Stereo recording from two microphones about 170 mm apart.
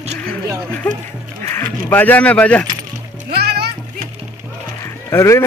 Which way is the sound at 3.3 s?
70° right (ahead or behind).